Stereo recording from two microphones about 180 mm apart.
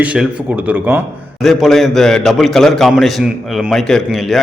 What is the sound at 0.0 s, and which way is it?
A man's voice, 5° right (ahead or behind).